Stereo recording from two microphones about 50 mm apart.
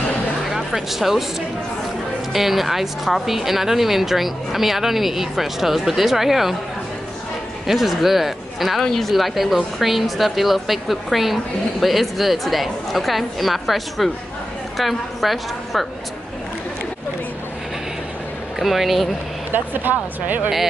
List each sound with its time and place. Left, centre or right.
0.5 s speech: centre
2.3 s a woman's voice: centre
7.6 s a woman's voice: centre
18.6 s a woman's voice: centre
19.5 s speech: right